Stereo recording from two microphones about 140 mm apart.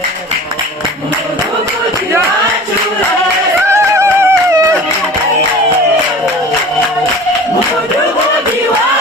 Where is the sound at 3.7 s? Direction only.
20° right (ahead or behind).